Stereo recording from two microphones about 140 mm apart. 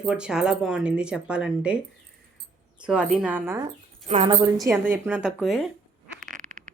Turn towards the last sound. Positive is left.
turn(degrees=-65)  # may be behind; listen again after turning